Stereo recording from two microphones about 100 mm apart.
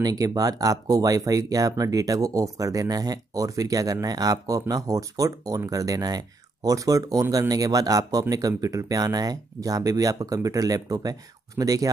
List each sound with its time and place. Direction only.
0.0 s speech: 40° right (ahead or behind)